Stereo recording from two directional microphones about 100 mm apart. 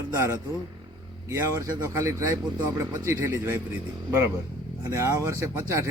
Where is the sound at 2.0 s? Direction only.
25° right (ahead or behind).